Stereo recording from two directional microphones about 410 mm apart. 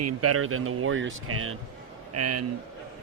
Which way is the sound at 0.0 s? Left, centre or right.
Right.